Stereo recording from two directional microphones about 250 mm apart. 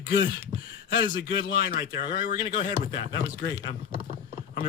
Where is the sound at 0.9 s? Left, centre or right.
Left.